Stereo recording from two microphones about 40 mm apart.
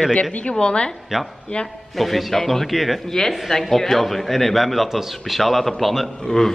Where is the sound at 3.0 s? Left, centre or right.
Centre.